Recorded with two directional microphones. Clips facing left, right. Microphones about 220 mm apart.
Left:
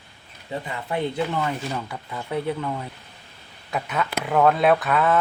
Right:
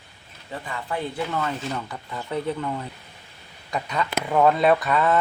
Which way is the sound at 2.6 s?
Centre (ahead or behind).